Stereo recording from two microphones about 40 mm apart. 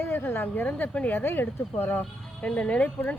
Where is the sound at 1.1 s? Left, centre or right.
Left.